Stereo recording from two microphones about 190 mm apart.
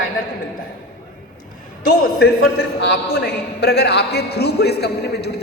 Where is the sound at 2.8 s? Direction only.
60° left (ahead or behind).